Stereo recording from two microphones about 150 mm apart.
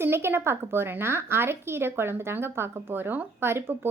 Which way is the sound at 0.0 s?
15° right (ahead or behind).